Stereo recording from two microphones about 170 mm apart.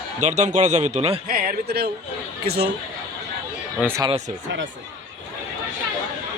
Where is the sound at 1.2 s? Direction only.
60° right (ahead or behind).